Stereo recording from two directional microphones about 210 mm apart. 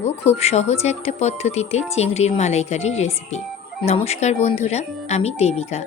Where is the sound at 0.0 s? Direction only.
30° left (ahead or behind).